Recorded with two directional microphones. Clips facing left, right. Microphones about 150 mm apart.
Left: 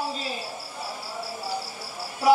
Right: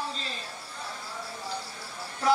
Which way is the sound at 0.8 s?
35° left (ahead or behind).